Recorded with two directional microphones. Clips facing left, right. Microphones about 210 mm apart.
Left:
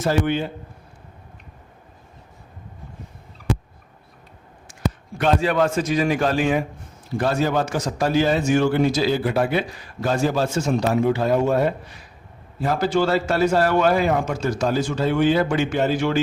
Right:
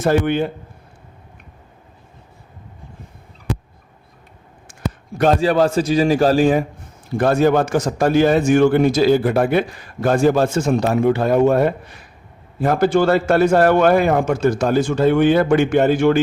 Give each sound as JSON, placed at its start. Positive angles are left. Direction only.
{"t": 0.0, "sound": "a man's voice", "side_deg": -55}
{"t": 4.7, "sound": "a man's voice", "side_deg": -45}
{"t": 7.1, "sound": "a man's voice", "side_deg": -50}